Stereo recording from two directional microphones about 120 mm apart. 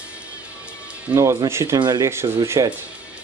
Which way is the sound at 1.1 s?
25° right (ahead or behind).